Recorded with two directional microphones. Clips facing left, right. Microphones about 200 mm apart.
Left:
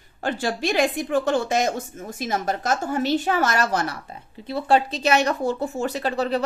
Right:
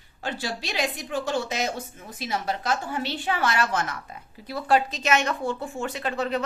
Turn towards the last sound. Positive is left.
turn(degrees=35)  # may be behind; listen again after turning